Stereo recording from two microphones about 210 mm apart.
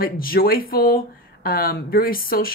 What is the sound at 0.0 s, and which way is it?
Speech, 45° left (ahead or behind).